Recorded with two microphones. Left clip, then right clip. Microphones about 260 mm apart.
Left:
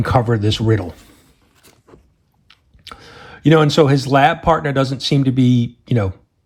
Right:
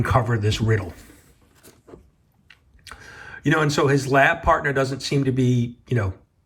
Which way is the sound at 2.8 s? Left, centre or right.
Centre.